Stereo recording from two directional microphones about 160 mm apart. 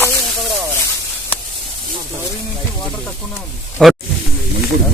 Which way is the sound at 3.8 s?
5° left (ahead or behind).